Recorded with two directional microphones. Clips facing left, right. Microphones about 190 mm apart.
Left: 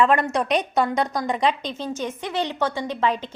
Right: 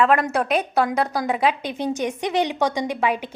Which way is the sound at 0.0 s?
Centre (ahead or behind).